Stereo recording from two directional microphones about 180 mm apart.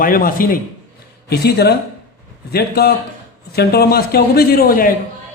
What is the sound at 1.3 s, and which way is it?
A man's voice, 65° left (ahead or behind).